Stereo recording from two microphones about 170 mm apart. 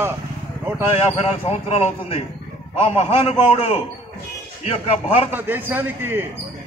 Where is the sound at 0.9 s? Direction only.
35° left (ahead or behind).